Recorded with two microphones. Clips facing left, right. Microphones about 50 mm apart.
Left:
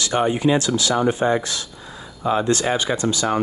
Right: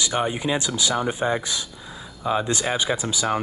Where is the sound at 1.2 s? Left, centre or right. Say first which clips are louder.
Left 3 dB; left.